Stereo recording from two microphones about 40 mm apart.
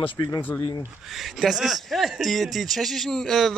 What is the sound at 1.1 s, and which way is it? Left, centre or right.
A man's voice, centre.